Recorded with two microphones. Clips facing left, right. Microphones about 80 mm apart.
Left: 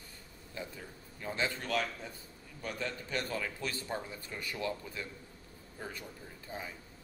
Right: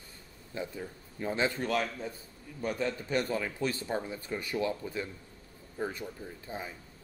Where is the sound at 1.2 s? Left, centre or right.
Right.